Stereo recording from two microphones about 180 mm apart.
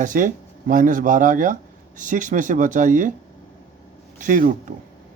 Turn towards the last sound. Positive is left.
turn(degrees=-50)  # may be behind; listen again after turning